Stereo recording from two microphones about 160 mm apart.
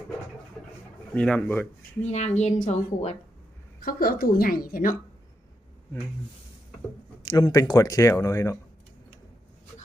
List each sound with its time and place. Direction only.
1.1 s speech: 5° left (ahead or behind)
2.0 s a woman's voice: 45° left (ahead or behind)
3.8 s a woman's voice: 65° left (ahead or behind)
7.2 s speech: 25° left (ahead or behind)